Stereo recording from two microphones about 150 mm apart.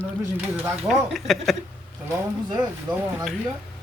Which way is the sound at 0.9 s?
Centre (ahead or behind).